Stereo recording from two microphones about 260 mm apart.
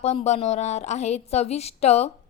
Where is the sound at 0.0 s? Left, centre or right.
Left.